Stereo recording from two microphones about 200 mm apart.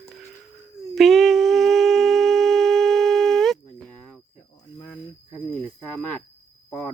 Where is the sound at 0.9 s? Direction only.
Centre (ahead or behind).